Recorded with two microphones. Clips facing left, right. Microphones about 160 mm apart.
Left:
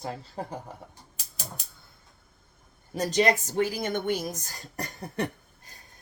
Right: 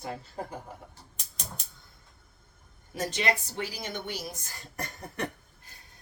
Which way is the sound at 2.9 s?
40° left (ahead or behind).